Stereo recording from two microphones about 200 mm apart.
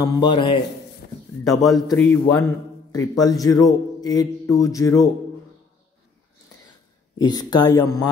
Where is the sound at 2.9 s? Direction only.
15° left (ahead or behind).